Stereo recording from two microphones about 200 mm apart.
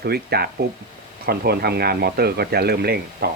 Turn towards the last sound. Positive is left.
turn(degrees=-50)  # may be behind; listen again after turning